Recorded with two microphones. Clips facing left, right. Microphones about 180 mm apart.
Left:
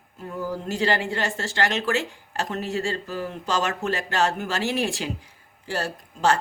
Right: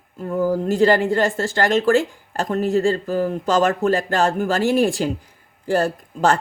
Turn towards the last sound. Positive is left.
turn(degrees=-50)  # may be behind; listen again after turning